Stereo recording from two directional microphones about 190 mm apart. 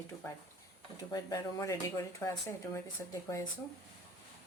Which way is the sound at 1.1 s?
20° left (ahead or behind).